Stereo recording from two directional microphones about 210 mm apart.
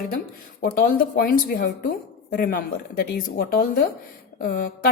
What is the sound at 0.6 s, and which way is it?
A woman's voice, 45° left (ahead or behind).